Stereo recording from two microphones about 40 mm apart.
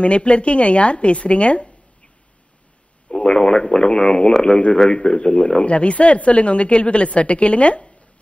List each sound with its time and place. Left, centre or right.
0.0 s speech: left
3.1 s a sound: left
3.6 s speech: left